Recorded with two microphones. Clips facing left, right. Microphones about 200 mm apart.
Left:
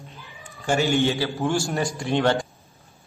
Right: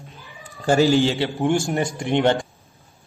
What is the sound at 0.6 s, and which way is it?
Speech, 35° right (ahead or behind).